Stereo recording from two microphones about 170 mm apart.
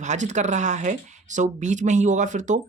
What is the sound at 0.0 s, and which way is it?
Speech, 45° right (ahead or behind).